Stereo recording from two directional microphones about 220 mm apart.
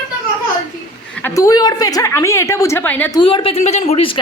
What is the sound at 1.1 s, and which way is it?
A woman's voice, 10° left (ahead or behind).